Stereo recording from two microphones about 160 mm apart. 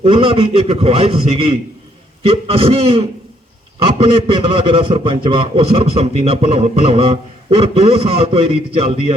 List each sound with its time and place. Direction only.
0.0 s a man's voice: 35° right (ahead or behind)